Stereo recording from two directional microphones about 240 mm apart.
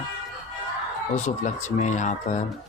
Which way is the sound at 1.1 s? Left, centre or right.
Left.